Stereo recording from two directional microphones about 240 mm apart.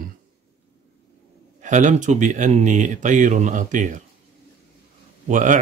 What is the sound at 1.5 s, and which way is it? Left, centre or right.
Speech, right.